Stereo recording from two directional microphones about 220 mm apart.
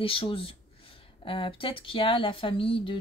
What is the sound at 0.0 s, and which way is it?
Speech, 25° left (ahead or behind).